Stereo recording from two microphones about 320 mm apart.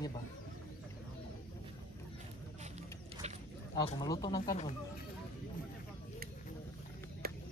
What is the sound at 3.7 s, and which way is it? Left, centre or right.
Speech, centre.